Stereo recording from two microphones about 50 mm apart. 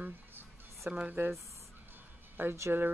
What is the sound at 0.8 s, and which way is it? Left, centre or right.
Speech, right.